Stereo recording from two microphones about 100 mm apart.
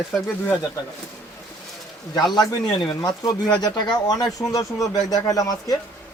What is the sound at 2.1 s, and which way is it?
Speech, 45° left (ahead or behind).